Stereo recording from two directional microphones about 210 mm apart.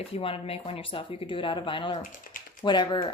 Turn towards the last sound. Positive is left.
turn(degrees=25)  # may be behind; listen again after turning